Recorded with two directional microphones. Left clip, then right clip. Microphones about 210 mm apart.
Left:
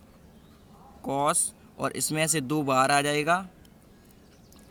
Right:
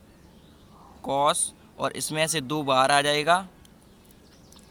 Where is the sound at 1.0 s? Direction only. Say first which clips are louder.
Right 3 dB; 30° left (ahead or behind).